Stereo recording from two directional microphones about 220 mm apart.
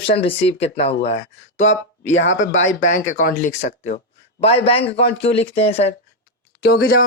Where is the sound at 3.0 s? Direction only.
35° left (ahead or behind).